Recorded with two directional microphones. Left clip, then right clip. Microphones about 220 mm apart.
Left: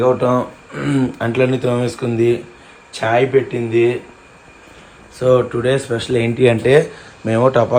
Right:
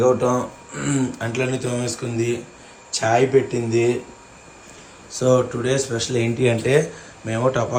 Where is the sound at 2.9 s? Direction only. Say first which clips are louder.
Left 3 dB; 15° right (ahead or behind).